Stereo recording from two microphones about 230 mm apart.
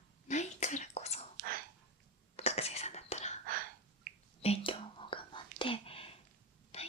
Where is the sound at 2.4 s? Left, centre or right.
Left.